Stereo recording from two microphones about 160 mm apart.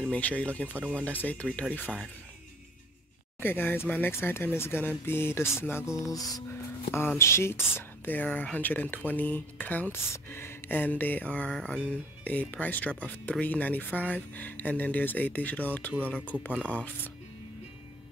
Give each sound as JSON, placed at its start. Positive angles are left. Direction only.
{"t": 0.0, "sound": "speech", "side_deg": 10}
{"t": 3.3, "sound": "speech", "side_deg": 15}
{"t": 6.1, "sound": "music", "side_deg": 25}
{"t": 6.9, "sound": "speech", "side_deg": 15}